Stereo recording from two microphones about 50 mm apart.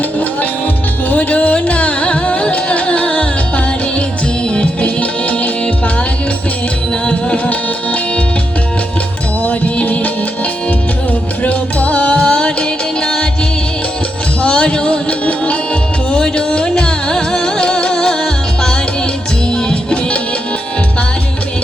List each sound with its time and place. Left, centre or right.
1.1 s music: left
4.4 s music: left
7.0 s music: centre
9.4 s music: left
11.4 s music: left
14.4 s music: centre